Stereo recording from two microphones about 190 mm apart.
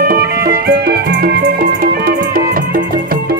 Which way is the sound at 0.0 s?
50° right (ahead or behind).